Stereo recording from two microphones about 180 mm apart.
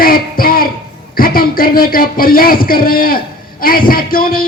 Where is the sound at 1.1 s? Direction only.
55° left (ahead or behind).